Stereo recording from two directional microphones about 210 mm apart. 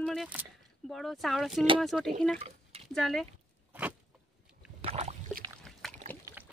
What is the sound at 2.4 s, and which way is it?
Drip, 30° right (ahead or behind).